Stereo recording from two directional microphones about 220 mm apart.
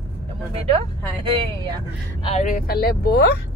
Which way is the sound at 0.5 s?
25° right (ahead or behind).